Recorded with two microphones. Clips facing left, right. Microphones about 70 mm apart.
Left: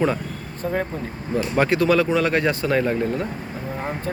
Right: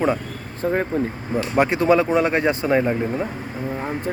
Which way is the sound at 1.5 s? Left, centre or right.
Right.